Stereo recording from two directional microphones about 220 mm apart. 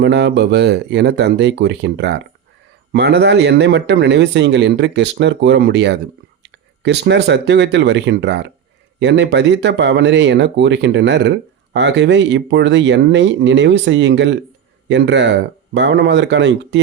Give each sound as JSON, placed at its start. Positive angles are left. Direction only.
{"t": 0.0, "sound": "speech", "side_deg": -50}